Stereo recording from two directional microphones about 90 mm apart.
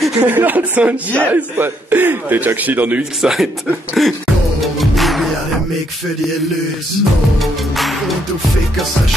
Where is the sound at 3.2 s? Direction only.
5° right (ahead or behind).